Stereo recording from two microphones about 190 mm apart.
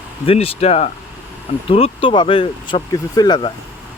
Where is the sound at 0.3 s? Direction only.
30° left (ahead or behind).